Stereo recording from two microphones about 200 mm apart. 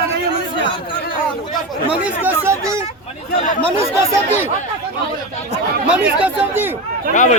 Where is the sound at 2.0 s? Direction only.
10° right (ahead or behind).